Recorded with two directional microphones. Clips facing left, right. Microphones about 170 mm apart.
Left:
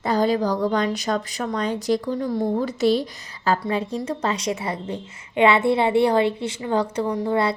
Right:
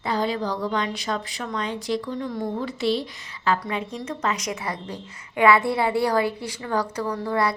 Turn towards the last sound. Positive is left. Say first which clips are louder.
# left 3 dB
turn(degrees=25)  # may be behind; listen again after turning